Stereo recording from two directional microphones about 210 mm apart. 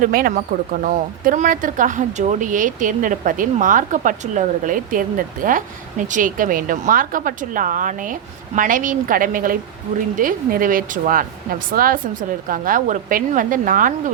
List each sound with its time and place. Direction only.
0.0 s speech: 45° right (ahead or behind)